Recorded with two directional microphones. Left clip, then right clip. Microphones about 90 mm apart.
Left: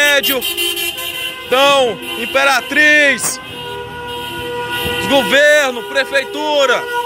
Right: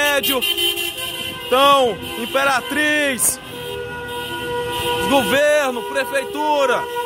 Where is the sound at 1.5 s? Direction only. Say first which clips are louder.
Left 2 dB; 30° right (ahead or behind).